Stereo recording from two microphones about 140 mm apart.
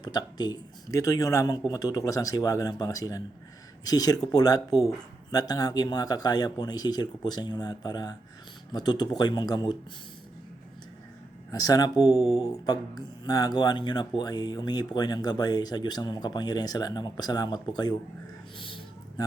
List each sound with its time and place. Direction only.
0.0 s speech: 30° left (ahead or behind)
11.5 s speech: 25° left (ahead or behind)
18.6 s a sound: 35° left (ahead or behind)